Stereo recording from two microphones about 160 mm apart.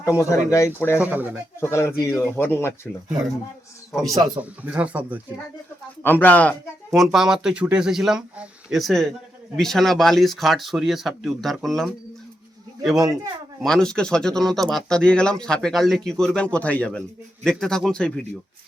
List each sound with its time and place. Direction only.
0.0 s speech: 20° left (ahead or behind)
0.9 s speech: 10° right (ahead or behind)
1.6 s speech: 15° left (ahead or behind)
4.4 s speech: 10° right (ahead or behind)
6.0 s speech: 10° left (ahead or behind)
13.6 s speech: 5° left (ahead or behind)